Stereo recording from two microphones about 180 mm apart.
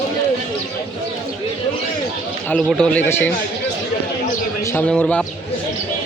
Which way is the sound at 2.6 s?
5° left (ahead or behind).